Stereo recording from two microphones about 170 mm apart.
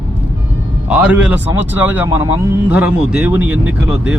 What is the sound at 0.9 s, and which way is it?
Speech, 10° right (ahead or behind).